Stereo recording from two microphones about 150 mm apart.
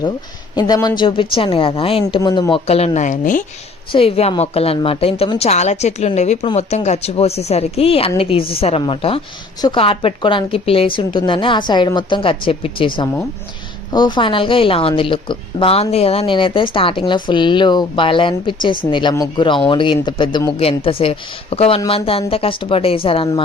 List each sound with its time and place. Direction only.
0.5 s a woman's voice: 25° left (ahead or behind); by 3.4 s 60° left (ahead or behind)
3.9 s a woman's voice: 40° left (ahead or behind)
13.9 s a woman's voice: 30° left (ahead or behind)